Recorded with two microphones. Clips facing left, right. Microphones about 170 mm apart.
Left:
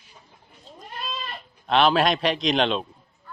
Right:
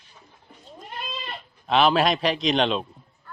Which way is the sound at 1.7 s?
Centre (ahead or behind).